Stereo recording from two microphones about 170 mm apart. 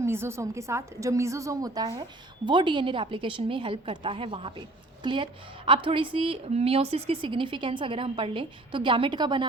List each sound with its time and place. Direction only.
0.0 s a woman's voice: 15° right (ahead or behind)